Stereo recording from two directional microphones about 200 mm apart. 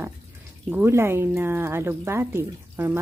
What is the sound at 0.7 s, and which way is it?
Speech, 10° right (ahead or behind).